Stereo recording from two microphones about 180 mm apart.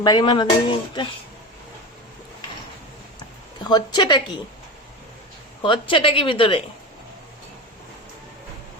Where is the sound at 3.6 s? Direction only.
25° left (ahead or behind).